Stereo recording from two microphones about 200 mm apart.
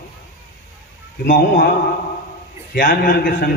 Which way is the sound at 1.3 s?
40° left (ahead or behind).